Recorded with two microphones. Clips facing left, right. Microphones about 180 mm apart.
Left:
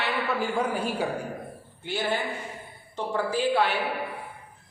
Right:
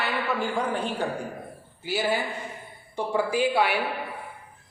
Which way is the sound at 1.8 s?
5° right (ahead or behind).